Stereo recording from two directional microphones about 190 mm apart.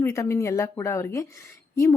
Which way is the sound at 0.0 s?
15° left (ahead or behind).